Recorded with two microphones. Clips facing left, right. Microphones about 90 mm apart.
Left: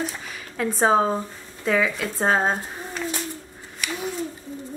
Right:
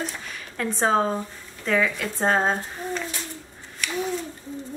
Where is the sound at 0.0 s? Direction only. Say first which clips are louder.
Left 2 dB; 5° left (ahead or behind).